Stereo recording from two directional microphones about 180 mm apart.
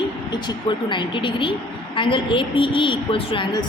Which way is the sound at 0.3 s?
25° left (ahead or behind).